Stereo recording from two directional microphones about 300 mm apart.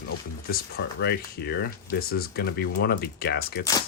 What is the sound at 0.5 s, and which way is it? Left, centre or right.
Speech, left.